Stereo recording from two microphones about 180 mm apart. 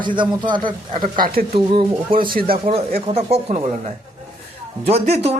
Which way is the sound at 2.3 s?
55° right (ahead or behind).